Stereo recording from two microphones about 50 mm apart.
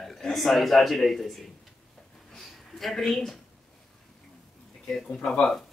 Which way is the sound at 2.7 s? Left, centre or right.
Centre.